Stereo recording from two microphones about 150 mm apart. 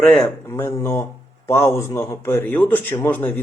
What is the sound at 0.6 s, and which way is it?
Speech, 15° left (ahead or behind).